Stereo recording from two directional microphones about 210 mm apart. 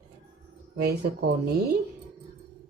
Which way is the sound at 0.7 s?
50° right (ahead or behind).